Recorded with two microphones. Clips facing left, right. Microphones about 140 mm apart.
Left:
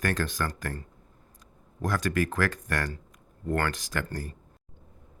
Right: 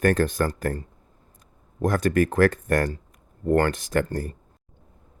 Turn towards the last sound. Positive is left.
turn(degrees=-40)  # may be behind; listen again after turning